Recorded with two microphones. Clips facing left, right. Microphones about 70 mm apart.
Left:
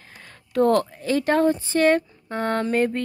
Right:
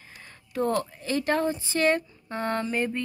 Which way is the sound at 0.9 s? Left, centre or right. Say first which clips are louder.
Left 5 dB; left.